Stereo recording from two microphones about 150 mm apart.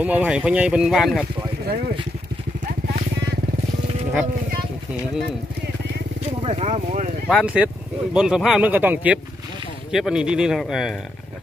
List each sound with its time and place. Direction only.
0.0 s speech: 10° right (ahead or behind)
6.4 s speech: 45° right (ahead or behind)
7.2 s speech: 5° right (ahead or behind)